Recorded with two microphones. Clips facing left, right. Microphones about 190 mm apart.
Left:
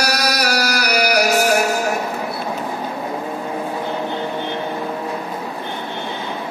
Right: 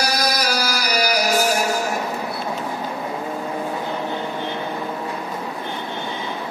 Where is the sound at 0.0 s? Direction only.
65° left (ahead or behind).